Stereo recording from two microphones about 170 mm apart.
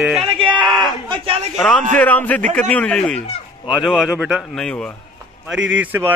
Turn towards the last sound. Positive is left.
turn(degrees=-10)  # may be behind; listen again after turning